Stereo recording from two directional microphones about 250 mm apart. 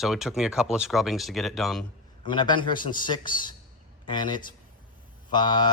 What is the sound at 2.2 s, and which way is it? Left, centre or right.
A man's voice, centre.